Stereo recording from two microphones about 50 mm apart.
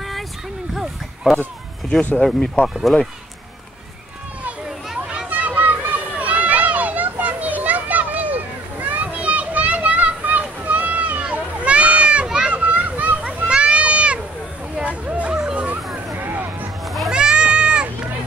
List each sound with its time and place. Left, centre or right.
0.7 s a sound: centre
2.1 s speech: centre
4.6 s children playing: centre
5.3 s children playing: right; by 12.5 s centre
12.5 s children playing: right
13.5 s children playing: right
14.8 s hubbub: right
16.2 s vehicle: right
17.1 s a sound: centre